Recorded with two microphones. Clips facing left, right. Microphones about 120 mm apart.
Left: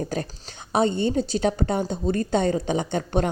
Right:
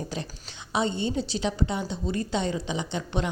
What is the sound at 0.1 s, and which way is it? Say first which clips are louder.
A woman's voice: left 6 dB; 45° left (ahead or behind).